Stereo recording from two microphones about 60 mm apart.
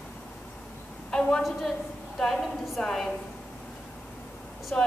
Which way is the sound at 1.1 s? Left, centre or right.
Centre.